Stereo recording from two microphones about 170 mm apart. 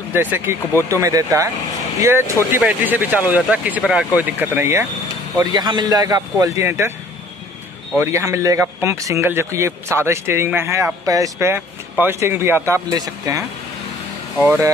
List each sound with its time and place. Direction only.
0.1 s a man's voice: 10° right (ahead or behind)
5.4 s a man's voice: 25° right (ahead or behind)
8.0 s speech: 20° right (ahead or behind)